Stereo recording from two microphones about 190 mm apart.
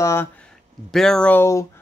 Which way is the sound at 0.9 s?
5° left (ahead or behind).